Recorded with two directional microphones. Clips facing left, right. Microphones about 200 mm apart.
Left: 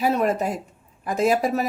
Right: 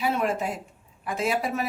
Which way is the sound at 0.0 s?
40° left (ahead or behind).